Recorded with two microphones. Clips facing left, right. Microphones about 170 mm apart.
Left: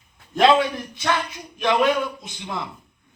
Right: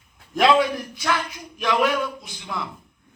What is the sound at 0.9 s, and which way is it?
Speech, 25° left (ahead or behind).